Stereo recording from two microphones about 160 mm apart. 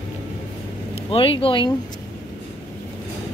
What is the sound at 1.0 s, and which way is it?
Speech, 35° left (ahead or behind).